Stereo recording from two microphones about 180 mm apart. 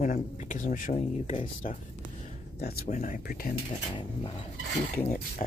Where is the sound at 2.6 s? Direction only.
60° left (ahead or behind).